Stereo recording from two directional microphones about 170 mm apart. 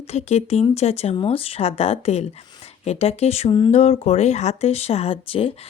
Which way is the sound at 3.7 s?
40° left (ahead or behind).